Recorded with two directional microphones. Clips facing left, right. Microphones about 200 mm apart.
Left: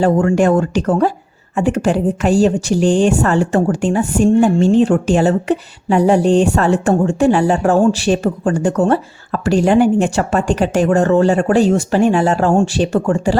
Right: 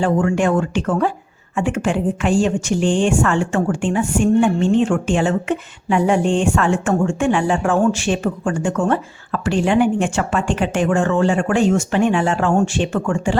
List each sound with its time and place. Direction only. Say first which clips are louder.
0.0 s a woman's voice: left 4 dB; 40° left (ahead or behind)